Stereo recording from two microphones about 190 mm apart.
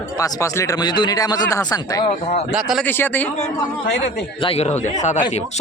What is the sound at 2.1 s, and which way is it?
Speech, 30° left (ahead or behind).